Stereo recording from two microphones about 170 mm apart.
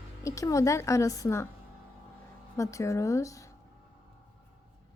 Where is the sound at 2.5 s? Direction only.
20° left (ahead or behind).